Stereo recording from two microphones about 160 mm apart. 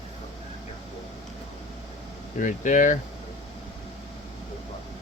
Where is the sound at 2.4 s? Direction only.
55° left (ahead or behind).